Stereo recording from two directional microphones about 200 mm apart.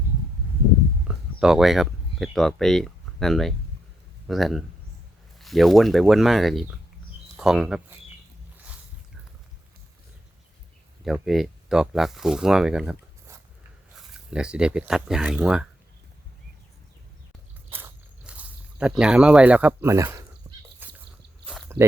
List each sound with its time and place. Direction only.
1.0 s speech: centre (ahead or behind)
11.0 s speech: centre (ahead or behind)
17.7 s a sound: 10° right (ahead or behind)